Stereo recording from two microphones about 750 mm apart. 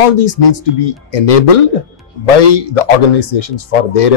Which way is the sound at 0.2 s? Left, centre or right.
Left.